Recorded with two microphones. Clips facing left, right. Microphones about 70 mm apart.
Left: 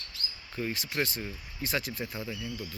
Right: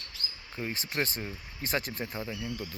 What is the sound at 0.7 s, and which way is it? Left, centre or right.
Speech, right.